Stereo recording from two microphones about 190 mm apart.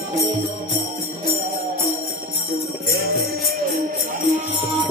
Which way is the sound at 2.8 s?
55° right (ahead or behind).